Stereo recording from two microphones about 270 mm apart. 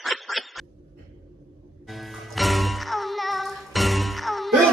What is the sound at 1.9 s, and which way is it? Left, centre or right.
Music, centre.